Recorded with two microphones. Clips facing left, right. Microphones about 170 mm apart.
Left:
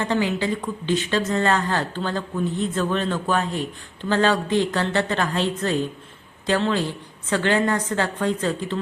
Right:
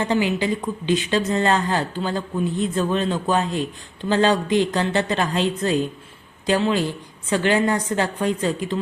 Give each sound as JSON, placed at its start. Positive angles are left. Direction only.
{"t": 0.0, "sound": "speech", "side_deg": -15}